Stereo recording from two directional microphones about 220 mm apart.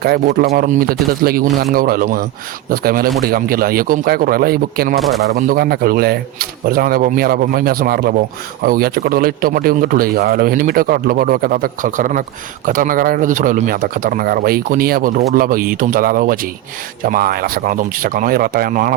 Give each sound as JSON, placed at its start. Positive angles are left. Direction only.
{"t": 0.0, "sound": "a man's voice", "side_deg": -45}